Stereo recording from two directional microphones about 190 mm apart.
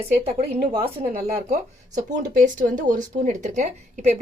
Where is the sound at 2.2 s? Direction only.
45° right (ahead or behind).